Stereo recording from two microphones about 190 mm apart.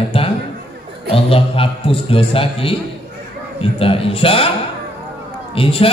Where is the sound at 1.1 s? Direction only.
30° left (ahead or behind).